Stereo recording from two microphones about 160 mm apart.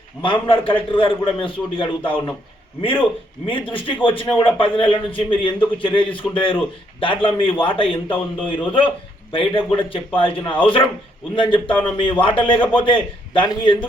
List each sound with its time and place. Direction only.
0.2 s a man's voice: 35° left (ahead or behind)
3.4 s a man's voice: 30° left (ahead or behind)